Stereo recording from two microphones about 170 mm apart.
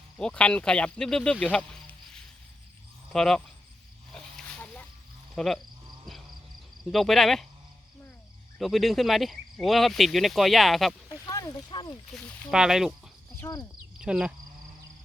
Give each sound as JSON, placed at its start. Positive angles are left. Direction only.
{"t": 0.2, "sound": "speech", "side_deg": 5}
{"t": 4.1, "sound": "pig", "side_deg": 5}
{"t": 5.3, "sound": "frog", "side_deg": 0}
{"t": 6.9, "sound": "speech", "side_deg": 0}
{"t": 8.5, "sound": "speech", "side_deg": 0}
{"t": 11.1, "sound": "speech", "side_deg": 20}
{"t": 12.1, "sound": "speech", "side_deg": 10}
{"t": 12.5, "sound": "speech", "side_deg": -5}
{"t": 13.5, "sound": "speech", "side_deg": 15}
{"t": 14.0, "sound": "speech", "side_deg": -5}